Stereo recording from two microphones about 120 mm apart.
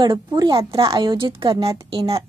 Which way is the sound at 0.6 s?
25° right (ahead or behind).